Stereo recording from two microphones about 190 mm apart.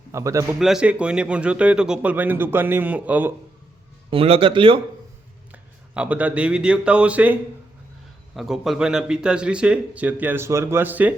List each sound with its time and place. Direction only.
0.1 s a man's voice: 15° right (ahead or behind)
0.6 s a man's voice: 5° right (ahead or behind)
4.1 s speech: 30° right (ahead or behind)
5.5 s speech: 5° right (ahead or behind)
8.4 s a man's voice: centre (ahead or behind)